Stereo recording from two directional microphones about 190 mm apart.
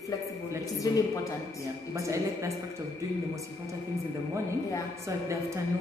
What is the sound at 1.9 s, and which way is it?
Speech, 15° right (ahead or behind).